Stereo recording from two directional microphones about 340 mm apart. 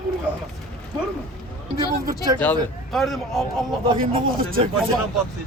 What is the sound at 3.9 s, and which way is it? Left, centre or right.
Speech, right.